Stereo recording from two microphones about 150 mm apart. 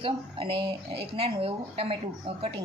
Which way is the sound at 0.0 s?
35° right (ahead or behind).